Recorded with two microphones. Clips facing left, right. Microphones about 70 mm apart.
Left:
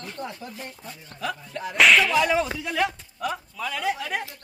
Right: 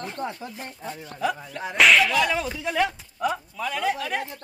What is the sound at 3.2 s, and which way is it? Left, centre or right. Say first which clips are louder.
Speech: right 3 dB; centre.